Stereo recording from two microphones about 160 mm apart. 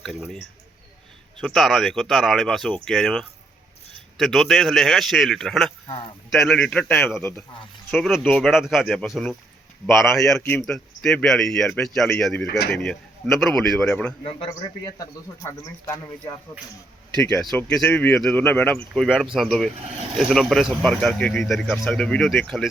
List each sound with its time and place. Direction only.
0.0 s a man's voice: centre (ahead or behind)
12.5 s speech: 80° left
12.8 s speech: 5° left (ahead or behind)
14.3 s speech: 35° left (ahead or behind)
17.6 s speech: 5° left (ahead or behind)